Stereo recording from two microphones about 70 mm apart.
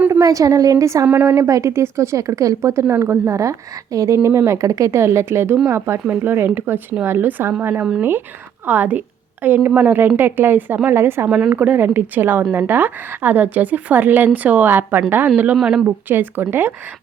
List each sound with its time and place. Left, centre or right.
0.1 s a woman's voice: right
2.8 s a woman's voice: right
11.3 s a woman's voice: centre
15.6 s speech: centre
16.0 s a woman's voice: right